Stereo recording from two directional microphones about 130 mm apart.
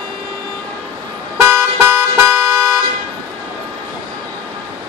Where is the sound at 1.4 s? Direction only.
20° right (ahead or behind).